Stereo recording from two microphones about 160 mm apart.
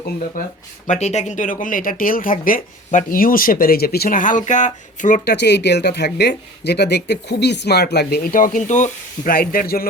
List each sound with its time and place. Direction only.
0.4 s speech: 60° left (ahead or behind)
0.9 s speech: 45° left (ahead or behind); by 9.9 s 65° left (ahead or behind)